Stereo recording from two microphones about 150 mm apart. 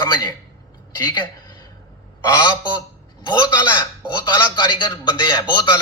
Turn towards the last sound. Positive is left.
turn(degrees=30)  # may be behind; listen again after turning